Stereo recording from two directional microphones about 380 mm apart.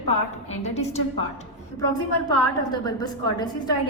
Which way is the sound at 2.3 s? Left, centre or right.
Centre.